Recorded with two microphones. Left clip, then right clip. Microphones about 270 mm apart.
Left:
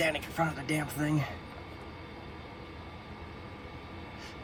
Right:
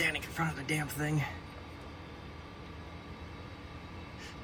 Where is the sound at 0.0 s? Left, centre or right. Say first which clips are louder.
Left 3 dB; centre.